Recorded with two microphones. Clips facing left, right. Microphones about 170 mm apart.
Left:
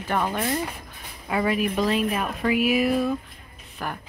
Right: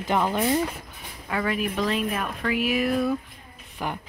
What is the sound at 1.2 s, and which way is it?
Speech, 15° left (ahead or behind).